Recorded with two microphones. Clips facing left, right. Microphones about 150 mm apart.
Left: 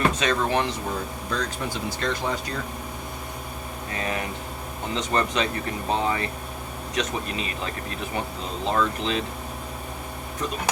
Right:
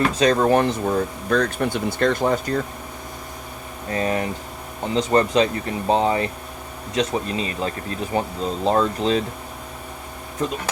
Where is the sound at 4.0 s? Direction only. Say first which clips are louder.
Right 7 dB; 35° right (ahead or behind).